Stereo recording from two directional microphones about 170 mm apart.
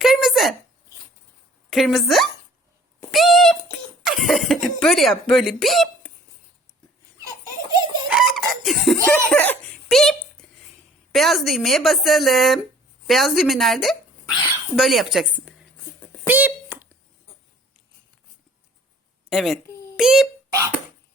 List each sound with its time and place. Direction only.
0.0 s a sound: centre (ahead or behind)
1.7 s speech: centre (ahead or behind)
7.7 s giggle: 25° right (ahead or behind)
8.0 s chicken: centre (ahead or behind)
9.0 s a child's voice: 10° left (ahead or behind)
16.2 s a sound: 10° right (ahead or behind)
19.3 s a woman's voice: centre (ahead or behind)